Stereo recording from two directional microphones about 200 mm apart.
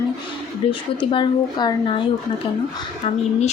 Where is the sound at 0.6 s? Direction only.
30° left (ahead or behind).